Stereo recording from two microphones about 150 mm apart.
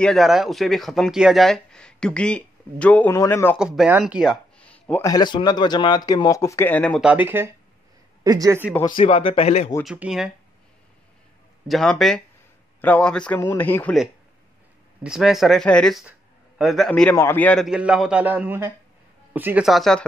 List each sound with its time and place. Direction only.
0.0 s speech: centre (ahead or behind); by 3.5 s 15° left (ahead or behind)
3.5 s speech: 5° right (ahead or behind)
4.6 s a sound: 10° left (ahead or behind)
5.0 s speech: 30° left (ahead or behind); by 7.0 s 10° left (ahead or behind)
7.0 s a man's voice: 10° right (ahead or behind)
8.8 s speech: 35° left (ahead or behind)
9.8 s speech: 5° right (ahead or behind)
11.6 s speech: centre (ahead or behind)
15.0 s speech: centre (ahead or behind)
17.1 s speech: 15° left (ahead or behind)
17.6 s a man's voice: 5° right (ahead or behind)